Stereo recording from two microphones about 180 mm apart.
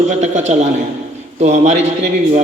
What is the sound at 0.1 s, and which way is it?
A man's voice, 40° right (ahead or behind).